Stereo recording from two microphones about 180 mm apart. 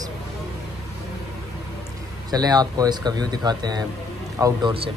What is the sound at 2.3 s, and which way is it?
Speech, 20° right (ahead or behind).